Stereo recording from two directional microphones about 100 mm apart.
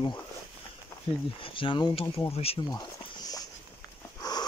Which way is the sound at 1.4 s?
60° left (ahead or behind).